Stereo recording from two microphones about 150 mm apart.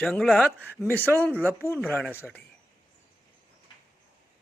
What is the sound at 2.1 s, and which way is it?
Speech, 15° left (ahead or behind).